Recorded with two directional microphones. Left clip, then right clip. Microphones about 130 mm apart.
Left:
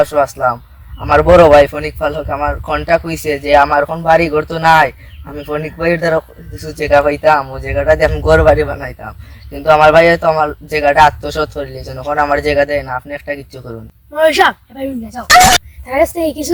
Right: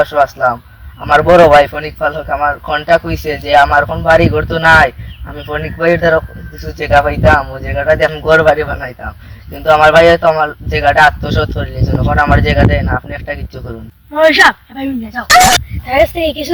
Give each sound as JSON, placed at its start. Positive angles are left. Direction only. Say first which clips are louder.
{"t": 0.0, "sound": "a man's voice", "louder": "right 1 dB", "side_deg": 30}
{"t": 14.1, "sound": "speech", "louder": "right 3 dB", "side_deg": 45}
{"t": 15.3, "sound": "speech", "louder": "even", "side_deg": 0}
{"t": 15.9, "sound": "speech", "louder": "right 2 dB", "side_deg": 45}